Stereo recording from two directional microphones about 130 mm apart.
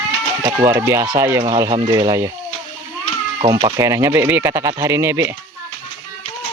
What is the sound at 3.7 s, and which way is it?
Speech, 25° right (ahead or behind).